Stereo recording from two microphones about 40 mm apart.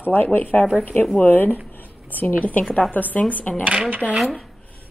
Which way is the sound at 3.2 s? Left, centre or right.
Left.